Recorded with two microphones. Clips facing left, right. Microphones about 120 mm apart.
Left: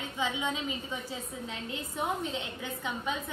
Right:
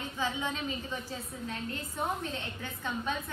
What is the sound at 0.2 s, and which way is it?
A woman's voice, 15° left (ahead or behind).